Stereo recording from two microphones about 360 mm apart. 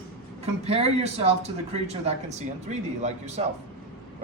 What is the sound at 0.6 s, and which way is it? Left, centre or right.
A man's voice, centre.